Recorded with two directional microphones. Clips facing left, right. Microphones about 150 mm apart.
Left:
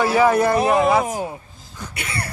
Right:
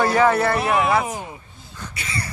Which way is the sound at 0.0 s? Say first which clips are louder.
Left 1 dB; 5° left (ahead or behind).